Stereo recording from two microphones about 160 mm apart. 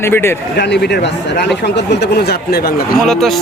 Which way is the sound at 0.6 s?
90° left.